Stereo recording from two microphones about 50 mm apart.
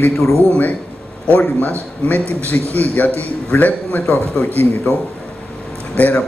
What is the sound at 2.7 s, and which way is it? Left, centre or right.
Speech, left.